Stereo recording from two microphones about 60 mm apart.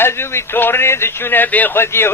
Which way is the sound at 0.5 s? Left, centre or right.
Left.